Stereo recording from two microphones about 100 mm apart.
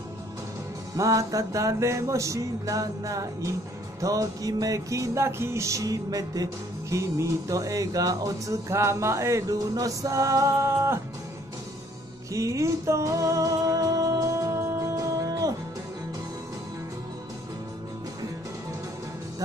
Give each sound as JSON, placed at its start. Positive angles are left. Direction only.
{"t": 0.9, "sound": "music", "side_deg": -35}
{"t": 12.3, "sound": "music", "side_deg": -30}